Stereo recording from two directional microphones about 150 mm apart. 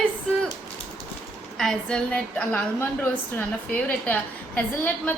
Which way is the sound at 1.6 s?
5° left (ahead or behind).